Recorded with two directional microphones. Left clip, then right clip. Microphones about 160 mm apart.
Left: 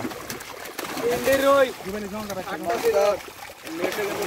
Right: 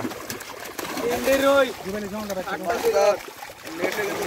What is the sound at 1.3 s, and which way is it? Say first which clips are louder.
Speech: even; 10° left (ahead or behind).